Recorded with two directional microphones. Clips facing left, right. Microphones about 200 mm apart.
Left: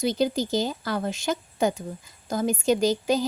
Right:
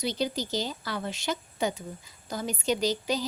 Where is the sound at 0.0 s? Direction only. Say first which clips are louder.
Left 6 dB; 50° left (ahead or behind).